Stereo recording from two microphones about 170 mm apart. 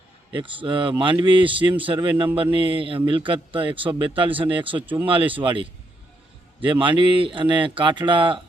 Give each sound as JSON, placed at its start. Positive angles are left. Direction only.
{"t": 0.3, "sound": "a man's voice", "side_deg": -30}